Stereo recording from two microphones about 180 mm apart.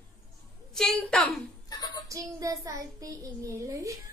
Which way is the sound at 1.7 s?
25° left (ahead or behind).